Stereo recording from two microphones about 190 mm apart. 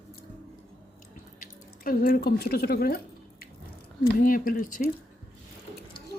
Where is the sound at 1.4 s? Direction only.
45° left (ahead or behind).